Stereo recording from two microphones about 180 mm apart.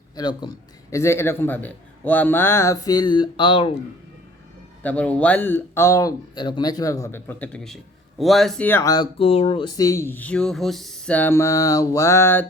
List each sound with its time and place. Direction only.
0.2 s a man's voice: 20° left (ahead or behind)
4.8 s a man's voice: 10° left (ahead or behind)
9.1 s a man's voice: 35° left (ahead or behind); by 12.5 s 10° left (ahead or behind)